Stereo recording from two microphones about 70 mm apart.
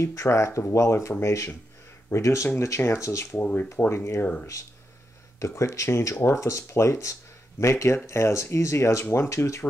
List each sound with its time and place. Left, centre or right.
0.0 s speech: left
5.4 s speech: left